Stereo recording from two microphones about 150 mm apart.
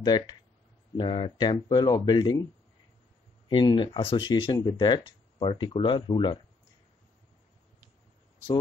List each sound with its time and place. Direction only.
0.0 s speech: 30° left (ahead or behind)
3.4 s speech: 30° left (ahead or behind)